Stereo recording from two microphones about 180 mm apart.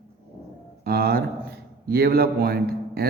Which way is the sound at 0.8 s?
60° right (ahead or behind).